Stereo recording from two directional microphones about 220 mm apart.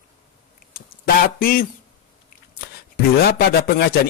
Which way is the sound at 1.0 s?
40° left (ahead or behind).